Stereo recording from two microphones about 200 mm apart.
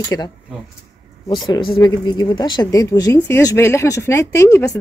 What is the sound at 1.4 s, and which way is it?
Speech, 25° left (ahead or behind).